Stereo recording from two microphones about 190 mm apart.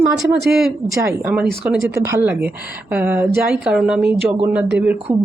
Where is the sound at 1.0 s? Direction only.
10° right (ahead or behind).